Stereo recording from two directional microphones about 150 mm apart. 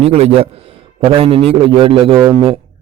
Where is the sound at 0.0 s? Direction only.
45° right (ahead or behind).